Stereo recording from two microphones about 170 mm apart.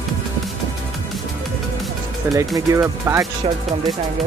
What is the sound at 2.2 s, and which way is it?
Speech, 15° right (ahead or behind).